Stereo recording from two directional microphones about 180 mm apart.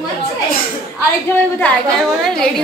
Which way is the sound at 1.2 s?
5° left (ahead or behind).